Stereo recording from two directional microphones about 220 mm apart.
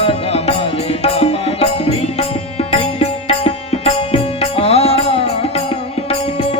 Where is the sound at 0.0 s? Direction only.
25° left (ahead or behind).